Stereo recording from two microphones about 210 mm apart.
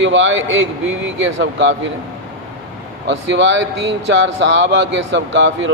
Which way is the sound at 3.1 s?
60° right (ahead or behind).